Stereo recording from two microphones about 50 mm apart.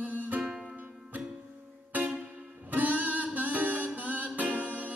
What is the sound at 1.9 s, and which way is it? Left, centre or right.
Music, right.